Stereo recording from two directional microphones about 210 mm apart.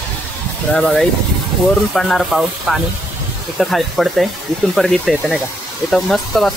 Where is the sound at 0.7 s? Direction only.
Centre (ahead or behind).